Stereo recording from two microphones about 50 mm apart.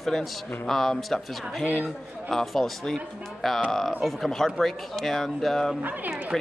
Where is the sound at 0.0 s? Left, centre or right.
Centre.